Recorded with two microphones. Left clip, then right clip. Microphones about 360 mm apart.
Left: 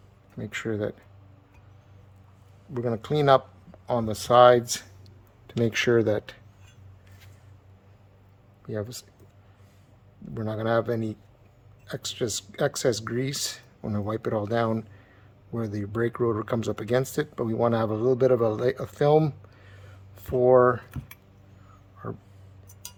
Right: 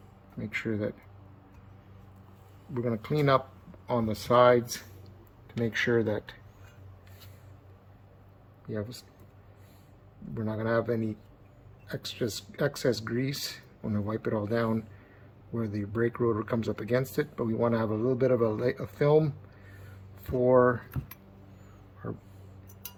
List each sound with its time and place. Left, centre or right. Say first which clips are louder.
0.5 s speech: left 3 dB; centre
2.7 s speech: left 4 dB; left
8.6 s speech: left 4 dB; left
10.3 s speech: left 4 dB; left